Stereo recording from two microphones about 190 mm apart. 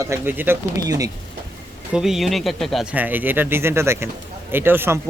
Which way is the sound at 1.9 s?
Centre (ahead or behind).